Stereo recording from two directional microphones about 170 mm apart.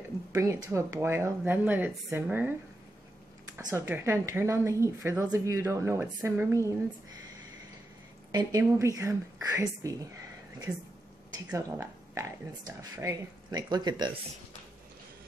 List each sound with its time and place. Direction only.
0.3 s speech: 15° right (ahead or behind)
3.5 s speech: 15° right (ahead or behind)
8.3 s speech: 20° right (ahead or behind)
11.3 s speech: 15° right (ahead or behind)